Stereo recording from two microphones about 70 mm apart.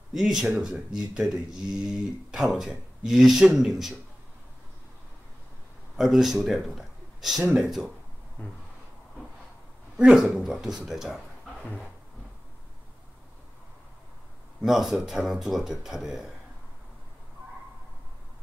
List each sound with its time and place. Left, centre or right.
0.1 s speech: centre
5.9 s speech: centre
8.4 s a sound: left
9.9 s speech: centre
10.2 s speech: centre
11.6 s speech: centre
14.6 s speech: centre